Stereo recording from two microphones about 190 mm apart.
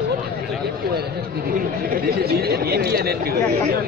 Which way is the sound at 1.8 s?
55° right (ahead or behind).